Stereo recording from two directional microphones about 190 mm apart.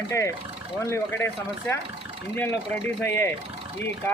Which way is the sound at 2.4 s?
10° left (ahead or behind).